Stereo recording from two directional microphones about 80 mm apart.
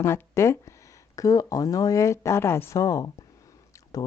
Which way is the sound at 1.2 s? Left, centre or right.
Left.